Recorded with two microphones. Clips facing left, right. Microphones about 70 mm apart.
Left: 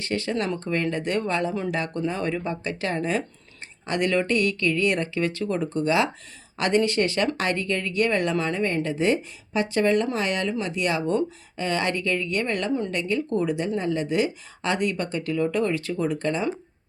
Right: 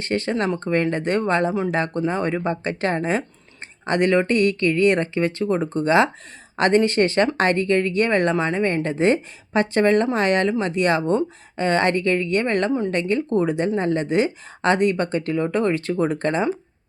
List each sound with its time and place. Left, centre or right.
0.0 s speech: right